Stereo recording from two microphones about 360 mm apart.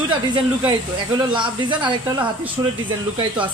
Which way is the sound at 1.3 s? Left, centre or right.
Centre.